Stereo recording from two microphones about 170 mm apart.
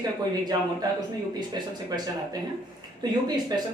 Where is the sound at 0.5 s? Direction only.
25° right (ahead or behind).